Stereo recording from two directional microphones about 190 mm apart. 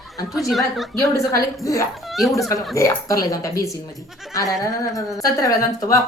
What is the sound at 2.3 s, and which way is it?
A woman's voice, 15° left (ahead or behind).